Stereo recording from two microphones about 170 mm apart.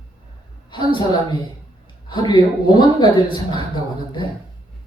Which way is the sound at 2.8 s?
25° left (ahead or behind).